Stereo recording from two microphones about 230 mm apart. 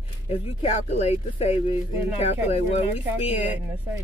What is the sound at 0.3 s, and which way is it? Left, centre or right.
Speech, left.